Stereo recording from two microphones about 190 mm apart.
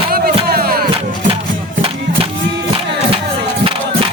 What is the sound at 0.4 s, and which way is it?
Music, 55° right (ahead or behind).